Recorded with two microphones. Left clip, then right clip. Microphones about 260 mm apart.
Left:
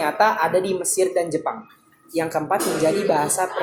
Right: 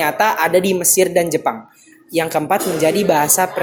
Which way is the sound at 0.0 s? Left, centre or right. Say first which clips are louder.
Right 3 dB; right.